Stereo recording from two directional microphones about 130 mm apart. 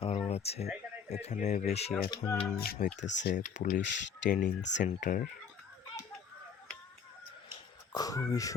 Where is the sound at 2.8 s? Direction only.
70° left (ahead or behind).